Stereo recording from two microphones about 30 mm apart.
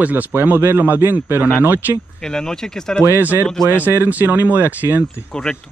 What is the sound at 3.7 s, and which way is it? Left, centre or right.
Speech, right.